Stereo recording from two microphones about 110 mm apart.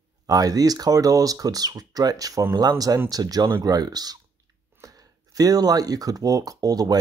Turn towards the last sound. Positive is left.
turn(degrees=-35)  # may be behind; listen again after turning